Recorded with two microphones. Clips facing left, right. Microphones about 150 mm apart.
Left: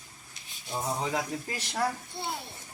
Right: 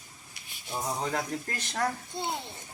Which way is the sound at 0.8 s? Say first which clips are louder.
Left 1 dB; 5° left (ahead or behind).